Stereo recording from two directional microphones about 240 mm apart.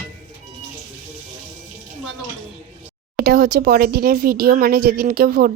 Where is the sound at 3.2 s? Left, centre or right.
Right.